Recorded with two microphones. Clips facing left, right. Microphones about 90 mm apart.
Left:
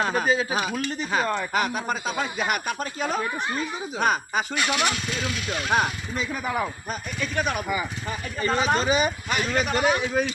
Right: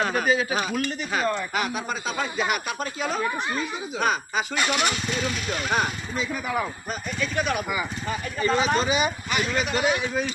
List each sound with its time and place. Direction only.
0.0 s speech: 30° left (ahead or behind)
4.6 s speech: 5° right (ahead or behind)
7.2 s speech: 45° left (ahead or behind)